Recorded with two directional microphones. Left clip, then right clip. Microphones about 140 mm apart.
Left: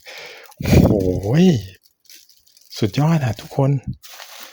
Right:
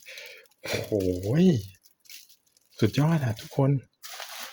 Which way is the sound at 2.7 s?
35° left (ahead or behind).